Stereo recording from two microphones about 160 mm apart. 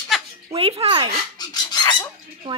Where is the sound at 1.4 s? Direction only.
25° left (ahead or behind).